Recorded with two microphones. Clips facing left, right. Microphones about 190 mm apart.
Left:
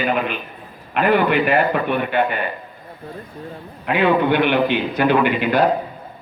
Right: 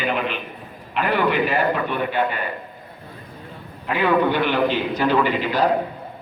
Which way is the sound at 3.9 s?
60° left (ahead or behind).